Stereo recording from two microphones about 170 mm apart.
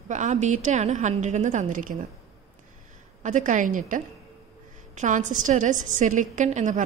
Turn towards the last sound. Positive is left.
turn(degrees=-45)  # may be behind; listen again after turning